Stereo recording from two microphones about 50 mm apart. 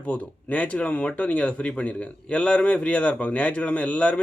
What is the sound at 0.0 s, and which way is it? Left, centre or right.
Speech, left.